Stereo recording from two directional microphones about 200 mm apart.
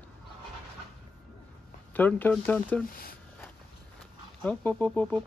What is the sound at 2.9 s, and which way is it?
Speech, 45° left (ahead or behind).